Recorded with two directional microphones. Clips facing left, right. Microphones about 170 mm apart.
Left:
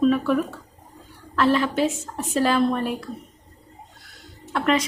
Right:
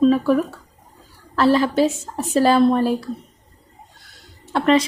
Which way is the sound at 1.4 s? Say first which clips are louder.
Right 4 dB; 35° right (ahead or behind).